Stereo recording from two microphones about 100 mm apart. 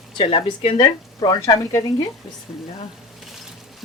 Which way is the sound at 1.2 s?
45° left (ahead or behind).